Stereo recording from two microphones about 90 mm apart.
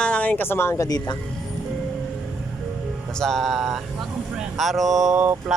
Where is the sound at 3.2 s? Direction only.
5° left (ahead or behind).